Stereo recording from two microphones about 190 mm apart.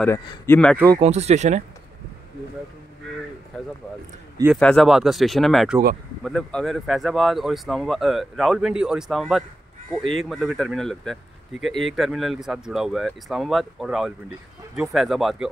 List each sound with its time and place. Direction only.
0.0 s speech: 10° left (ahead or behind)
0.9 s speech: 35° right (ahead or behind)
4.6 s speech: 5° left (ahead or behind)